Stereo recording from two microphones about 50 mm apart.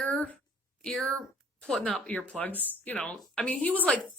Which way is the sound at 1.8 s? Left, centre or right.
Left.